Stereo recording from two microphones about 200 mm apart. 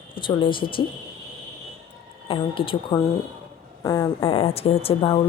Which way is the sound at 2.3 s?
25° left (ahead or behind).